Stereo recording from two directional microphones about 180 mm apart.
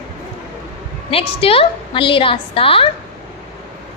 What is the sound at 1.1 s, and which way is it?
A woman's voice, 30° left (ahead or behind).